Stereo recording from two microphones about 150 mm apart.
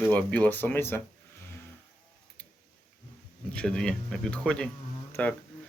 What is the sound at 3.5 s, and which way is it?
Speech, 5° left (ahead or behind).